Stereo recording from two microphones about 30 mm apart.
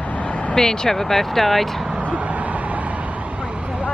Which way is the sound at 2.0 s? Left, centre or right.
Right.